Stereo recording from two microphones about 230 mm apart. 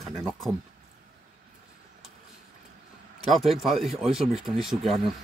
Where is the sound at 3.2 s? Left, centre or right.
Centre.